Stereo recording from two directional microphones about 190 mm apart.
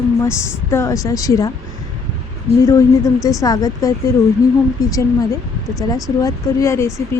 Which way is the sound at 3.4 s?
20° left (ahead or behind).